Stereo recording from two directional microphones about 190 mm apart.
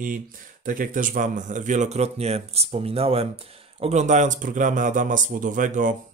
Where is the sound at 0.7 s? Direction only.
45° right (ahead or behind).